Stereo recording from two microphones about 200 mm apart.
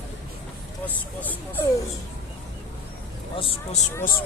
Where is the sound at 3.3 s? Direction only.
25° left (ahead or behind).